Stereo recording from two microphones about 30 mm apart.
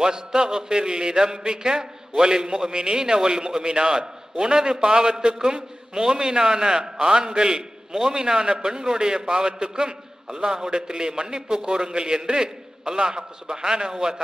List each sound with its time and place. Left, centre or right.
0.0 s a man's voice: centre